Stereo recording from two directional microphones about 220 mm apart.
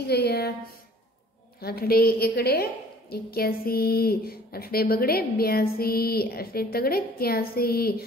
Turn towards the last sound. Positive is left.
turn(degrees=45)  # may be behind; listen again after turning